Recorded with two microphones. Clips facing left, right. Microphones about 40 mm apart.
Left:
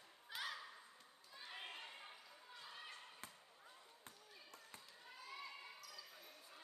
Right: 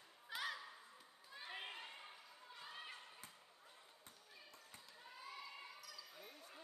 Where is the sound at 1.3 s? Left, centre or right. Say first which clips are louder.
Right 2 dB; centre.